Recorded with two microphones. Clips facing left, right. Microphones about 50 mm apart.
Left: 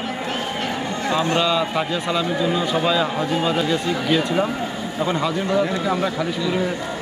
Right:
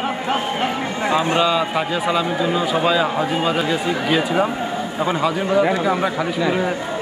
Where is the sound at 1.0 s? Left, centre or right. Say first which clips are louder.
Right 2 dB; centre.